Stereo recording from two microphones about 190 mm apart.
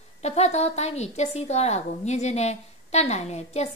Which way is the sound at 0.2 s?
35° left (ahead or behind).